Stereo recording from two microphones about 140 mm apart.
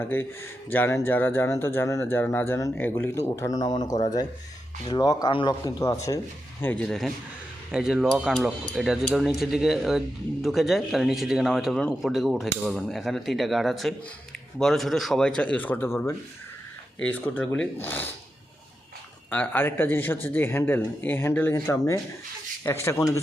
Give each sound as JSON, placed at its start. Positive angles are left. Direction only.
{"t": 0.0, "sound": "speech", "side_deg": 15}
{"t": 4.9, "sound": "speech", "side_deg": 30}
{"t": 6.6, "sound": "speech", "side_deg": 10}
{"t": 19.3, "sound": "speech", "side_deg": 15}